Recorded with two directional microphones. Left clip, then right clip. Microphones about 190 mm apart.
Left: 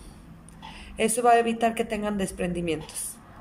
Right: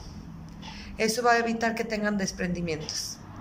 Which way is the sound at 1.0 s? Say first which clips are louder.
Left 3 dB; 15° left (ahead or behind).